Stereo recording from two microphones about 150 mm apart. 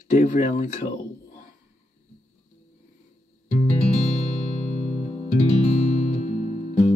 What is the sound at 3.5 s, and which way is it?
Music, 50° left (ahead or behind).